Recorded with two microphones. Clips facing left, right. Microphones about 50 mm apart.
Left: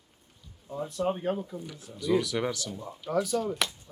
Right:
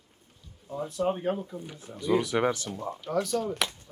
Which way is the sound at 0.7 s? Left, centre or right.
Centre.